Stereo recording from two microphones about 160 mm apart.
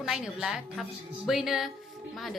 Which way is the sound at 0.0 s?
5° right (ahead or behind).